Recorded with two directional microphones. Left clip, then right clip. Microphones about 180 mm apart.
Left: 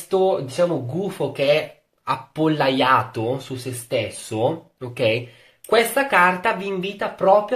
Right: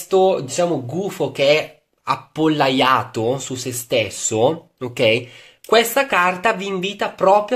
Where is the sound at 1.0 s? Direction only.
40° right (ahead or behind).